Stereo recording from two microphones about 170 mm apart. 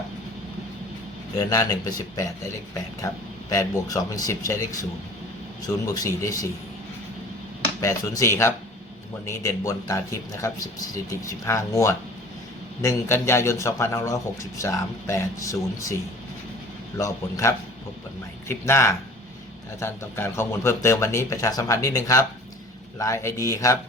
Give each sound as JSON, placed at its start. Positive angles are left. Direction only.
{"t": 1.4, "sound": "speech", "side_deg": 20}
{"t": 3.0, "sound": "speech", "side_deg": 20}
{"t": 7.8, "sound": "speech", "side_deg": 20}
{"t": 17.0, "sound": "speech", "side_deg": 20}